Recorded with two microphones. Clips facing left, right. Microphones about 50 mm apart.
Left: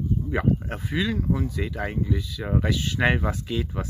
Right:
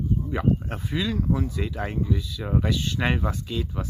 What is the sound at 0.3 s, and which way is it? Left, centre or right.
Speech, centre.